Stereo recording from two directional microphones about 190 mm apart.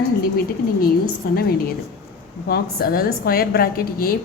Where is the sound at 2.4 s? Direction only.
55° left (ahead or behind).